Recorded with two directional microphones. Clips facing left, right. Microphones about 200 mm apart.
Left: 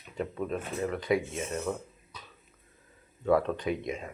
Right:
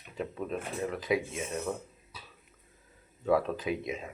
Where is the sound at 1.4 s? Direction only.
5° right (ahead or behind).